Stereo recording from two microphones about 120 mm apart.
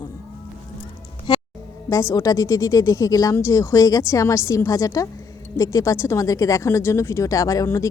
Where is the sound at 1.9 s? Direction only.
25° left (ahead or behind).